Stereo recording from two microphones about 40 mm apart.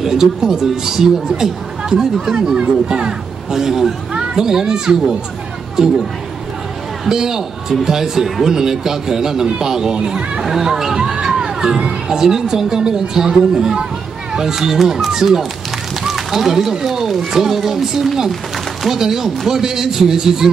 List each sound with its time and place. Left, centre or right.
0.0 s speech: centre
7.1 s speech: centre
10.4 s speech: centre